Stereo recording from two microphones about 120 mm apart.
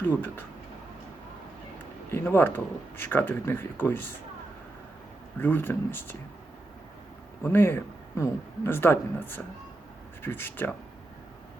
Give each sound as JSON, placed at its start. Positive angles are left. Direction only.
{"t": 0.0, "sound": "speech", "side_deg": 15}
{"t": 2.0, "sound": "speech", "side_deg": 20}
{"t": 5.4, "sound": "speech", "side_deg": 15}
{"t": 7.4, "sound": "speech", "side_deg": 20}